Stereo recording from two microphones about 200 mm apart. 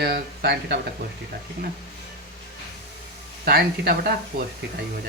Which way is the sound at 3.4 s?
50° right (ahead or behind).